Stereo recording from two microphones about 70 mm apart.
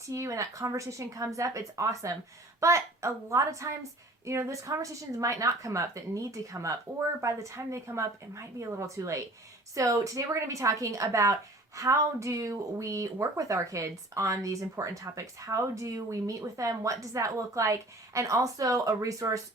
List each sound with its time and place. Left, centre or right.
0.1 s a woman's voice: right